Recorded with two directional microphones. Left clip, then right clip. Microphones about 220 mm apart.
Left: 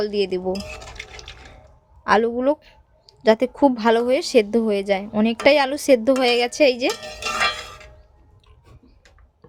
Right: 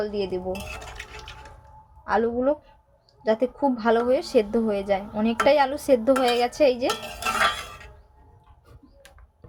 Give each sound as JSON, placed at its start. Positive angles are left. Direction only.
{"t": 0.0, "sound": "a woman's voice", "side_deg": 40}
{"t": 2.0, "sound": "a woman's voice", "side_deg": 40}